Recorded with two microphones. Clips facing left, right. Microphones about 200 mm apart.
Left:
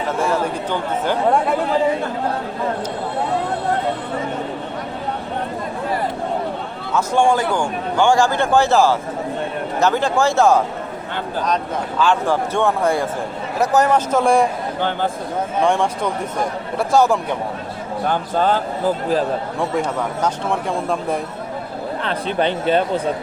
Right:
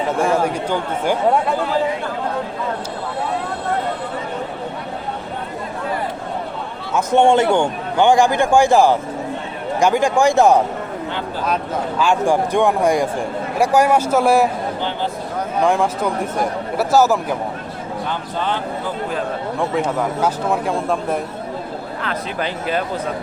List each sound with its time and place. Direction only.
0.4 s a man's voice: 10° right (ahead or behind)
6.9 s a man's voice: 20° right (ahead or behind); by 14.5 s 5° right (ahead or behind)
14.8 s speech: 50° left (ahead or behind)
15.6 s a man's voice: 5° right (ahead or behind)
18.0 s speech: 45° left (ahead or behind)
19.5 s a man's voice: 5° right (ahead or behind)
22.0 s speech: 30° left (ahead or behind)